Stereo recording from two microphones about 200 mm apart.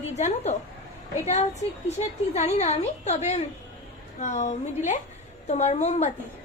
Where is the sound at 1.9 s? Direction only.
35° left (ahead or behind).